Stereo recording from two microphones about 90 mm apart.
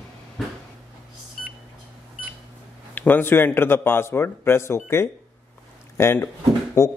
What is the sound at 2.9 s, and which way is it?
A man's voice, 20° left (ahead or behind).